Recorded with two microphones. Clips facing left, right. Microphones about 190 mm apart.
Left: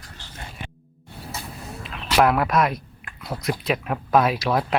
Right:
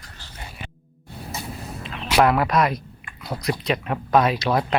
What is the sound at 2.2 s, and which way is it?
Speech, centre (ahead or behind).